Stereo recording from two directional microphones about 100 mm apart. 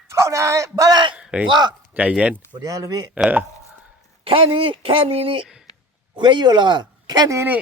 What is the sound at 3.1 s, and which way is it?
Speech, 15° right (ahead or behind).